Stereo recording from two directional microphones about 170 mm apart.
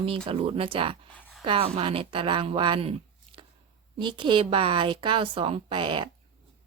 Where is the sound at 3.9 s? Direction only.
30° right (ahead or behind).